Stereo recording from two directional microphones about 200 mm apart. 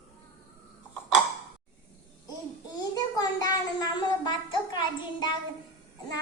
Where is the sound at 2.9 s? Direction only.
20° left (ahead or behind).